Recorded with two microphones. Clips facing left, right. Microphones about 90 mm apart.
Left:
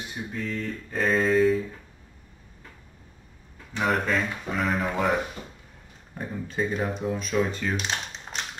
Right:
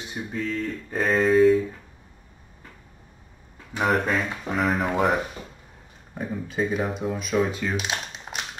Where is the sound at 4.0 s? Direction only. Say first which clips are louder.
Right 1 dB; 20° right (ahead or behind).